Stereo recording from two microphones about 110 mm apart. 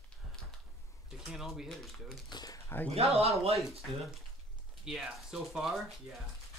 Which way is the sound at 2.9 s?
65° right (ahead or behind).